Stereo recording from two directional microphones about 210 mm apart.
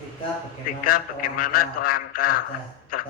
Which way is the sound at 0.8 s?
40° left (ahead or behind).